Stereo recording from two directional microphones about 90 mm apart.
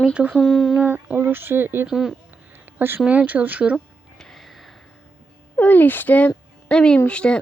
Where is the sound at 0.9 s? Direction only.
25° right (ahead or behind).